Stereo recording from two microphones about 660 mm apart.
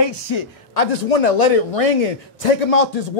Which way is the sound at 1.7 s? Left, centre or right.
Left.